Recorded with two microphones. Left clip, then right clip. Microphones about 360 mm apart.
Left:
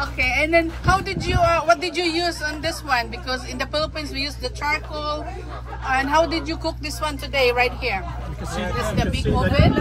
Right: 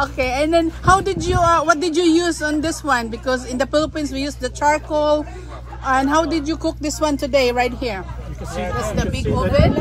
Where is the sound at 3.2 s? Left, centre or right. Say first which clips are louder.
Right 6 dB; right.